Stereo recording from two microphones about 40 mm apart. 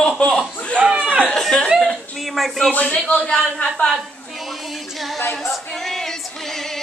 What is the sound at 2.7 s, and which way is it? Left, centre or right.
Speech, left.